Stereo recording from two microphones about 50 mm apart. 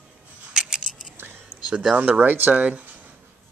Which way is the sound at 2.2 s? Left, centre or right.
Right.